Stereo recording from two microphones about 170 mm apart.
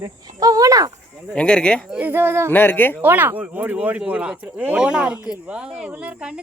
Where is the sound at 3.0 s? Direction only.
10° right (ahead or behind).